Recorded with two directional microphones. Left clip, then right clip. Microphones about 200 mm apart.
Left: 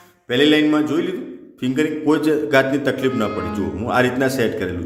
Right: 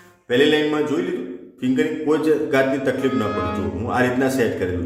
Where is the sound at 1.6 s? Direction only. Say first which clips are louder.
Left 1 dB; 45° left (ahead or behind).